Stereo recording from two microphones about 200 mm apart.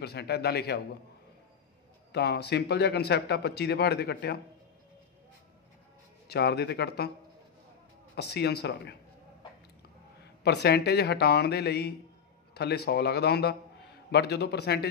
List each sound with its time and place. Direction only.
0.0 s speech: 55° left (ahead or behind)
2.1 s speech: 55° left (ahead or behind)
6.2 s speech: 55° left (ahead or behind)
8.2 s speech: 55° left (ahead or behind)
10.2 s speech: 55° left (ahead or behind)